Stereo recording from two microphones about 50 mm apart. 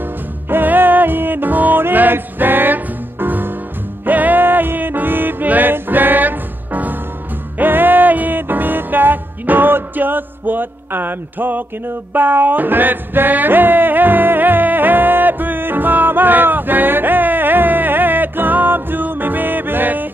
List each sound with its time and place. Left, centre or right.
0.5 s music: right